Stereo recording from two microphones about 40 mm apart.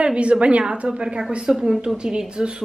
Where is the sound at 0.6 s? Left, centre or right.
Right.